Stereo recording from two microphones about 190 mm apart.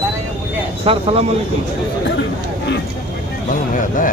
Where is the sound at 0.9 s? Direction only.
30° right (ahead or behind).